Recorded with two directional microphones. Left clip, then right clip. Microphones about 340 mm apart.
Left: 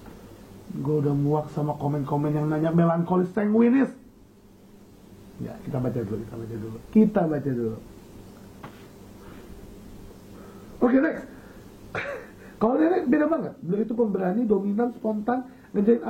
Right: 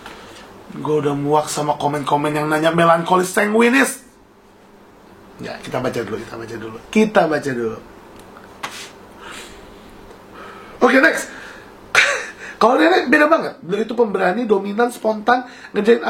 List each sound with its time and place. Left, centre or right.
0.8 s speech: centre
1.6 s speech: right
1.9 s speech: centre
5.4 s speech: centre
10.9 s a man's voice: centre
11.9 s a sound: centre
12.8 s speech: centre